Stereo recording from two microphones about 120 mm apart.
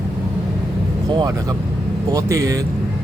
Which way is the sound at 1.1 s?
35° right (ahead or behind).